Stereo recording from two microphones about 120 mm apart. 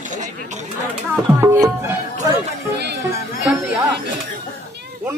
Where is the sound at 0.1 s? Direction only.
90° right.